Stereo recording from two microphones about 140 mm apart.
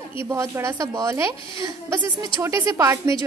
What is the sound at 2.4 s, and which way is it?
Speech, 20° right (ahead or behind).